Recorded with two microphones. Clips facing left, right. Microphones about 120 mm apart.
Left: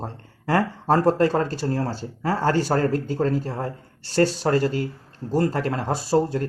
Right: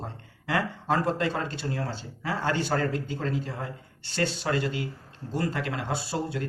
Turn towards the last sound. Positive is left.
turn(degrees=40)  # may be behind; listen again after turning